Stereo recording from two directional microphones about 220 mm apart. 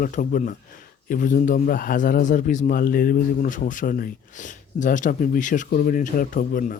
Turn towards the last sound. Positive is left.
turn(degrees=40)  # may be behind; listen again after turning